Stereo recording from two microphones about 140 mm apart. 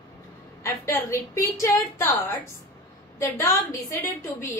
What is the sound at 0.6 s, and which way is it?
A woman's voice, 20° left (ahead or behind).